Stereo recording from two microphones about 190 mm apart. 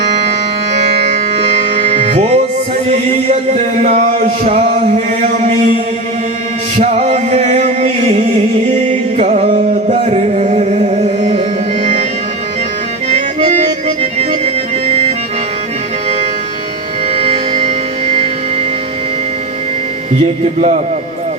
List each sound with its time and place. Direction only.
0.7 s music: 35° right (ahead or behind)
6.7 s music: 35° right (ahead or behind)
13.1 s accordion: 35° right (ahead or behind)
17.2 s music: 30° right (ahead or behind)
20.2 s music: 35° right (ahead or behind)